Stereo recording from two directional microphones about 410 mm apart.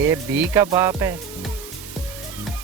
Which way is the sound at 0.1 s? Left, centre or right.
Centre.